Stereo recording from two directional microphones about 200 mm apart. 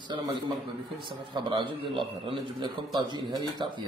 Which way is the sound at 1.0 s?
25° right (ahead or behind).